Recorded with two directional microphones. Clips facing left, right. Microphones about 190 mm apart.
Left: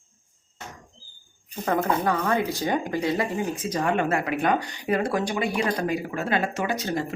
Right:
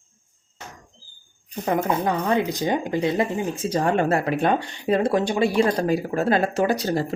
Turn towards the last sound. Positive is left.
turn(degrees=-35)  # may be behind; listen again after turning